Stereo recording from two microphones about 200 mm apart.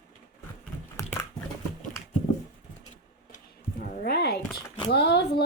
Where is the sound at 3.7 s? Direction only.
45° left (ahead or behind).